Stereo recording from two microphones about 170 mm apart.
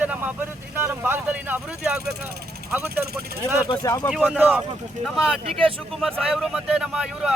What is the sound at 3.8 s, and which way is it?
Speech, 15° left (ahead or behind).